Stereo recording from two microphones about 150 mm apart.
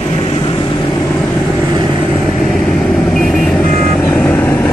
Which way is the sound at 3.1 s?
Centre (ahead or behind).